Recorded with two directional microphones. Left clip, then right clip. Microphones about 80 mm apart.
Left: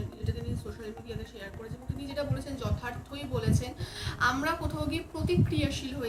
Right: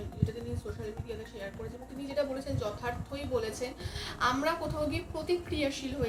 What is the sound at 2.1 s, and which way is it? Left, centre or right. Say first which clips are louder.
Speech: right 3 dB; left.